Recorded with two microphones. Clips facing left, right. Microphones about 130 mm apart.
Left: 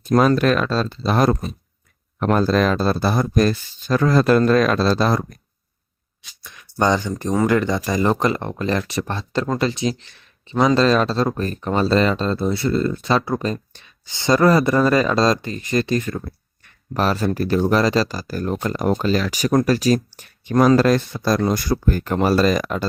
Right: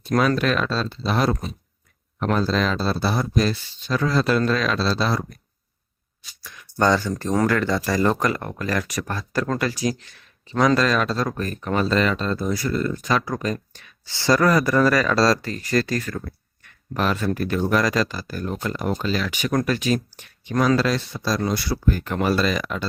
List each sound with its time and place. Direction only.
0.2 s speech: 40° left (ahead or behind)
6.4 s a sound: 20° left (ahead or behind)
7.4 s speech: 20° left (ahead or behind)
16.9 s speech: 35° left (ahead or behind)